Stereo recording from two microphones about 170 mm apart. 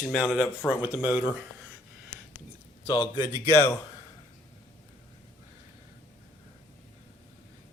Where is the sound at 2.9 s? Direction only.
25° left (ahead or behind).